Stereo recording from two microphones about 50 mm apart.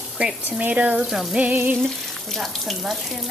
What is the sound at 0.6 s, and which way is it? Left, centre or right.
Speech, right.